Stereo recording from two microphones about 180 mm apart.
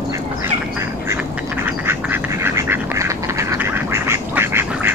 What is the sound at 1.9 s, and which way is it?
Duck, 15° right (ahead or behind).